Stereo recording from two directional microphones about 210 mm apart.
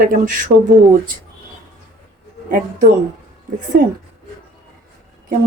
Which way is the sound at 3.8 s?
45° right (ahead or behind).